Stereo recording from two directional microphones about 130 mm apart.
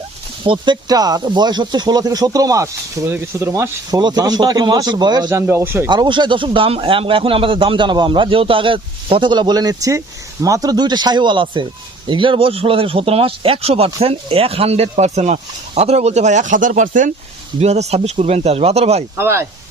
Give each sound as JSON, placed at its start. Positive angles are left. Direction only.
{"t": 0.4, "sound": "speech", "side_deg": -40}
{"t": 5.3, "sound": "speech", "side_deg": -20}
{"t": 5.9, "sound": "speech", "side_deg": -35}
{"t": 17.6, "sound": "speech", "side_deg": -55}
{"t": 19.1, "sound": "speech", "side_deg": -20}